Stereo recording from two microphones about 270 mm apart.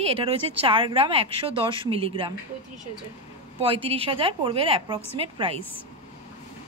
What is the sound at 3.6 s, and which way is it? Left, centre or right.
A woman's voice, right.